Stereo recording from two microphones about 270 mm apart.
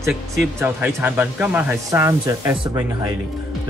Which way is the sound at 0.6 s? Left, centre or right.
Centre.